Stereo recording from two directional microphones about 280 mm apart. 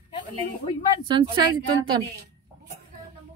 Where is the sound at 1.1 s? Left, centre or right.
Centre.